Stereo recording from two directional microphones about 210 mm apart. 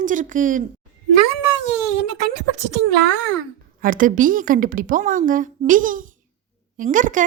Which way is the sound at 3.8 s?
40° right (ahead or behind).